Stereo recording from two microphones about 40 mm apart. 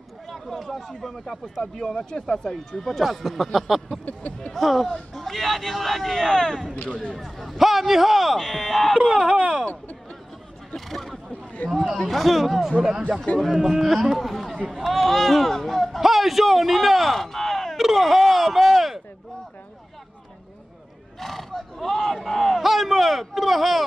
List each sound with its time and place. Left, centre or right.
0.3 s a man's voice: centre
2.8 s a man's voice: centre
4.0 s speech: left
4.6 s a man's voice: centre
6.7 s speech: left
7.2 s a man's voice: centre
8.9 s speech: centre
9.3 s a sound: right
10.9 s a sound: centre
11.6 s chatter: left
12.0 s a man's voice: centre
17.7 s a sound: centre
21.2 s a sound: centre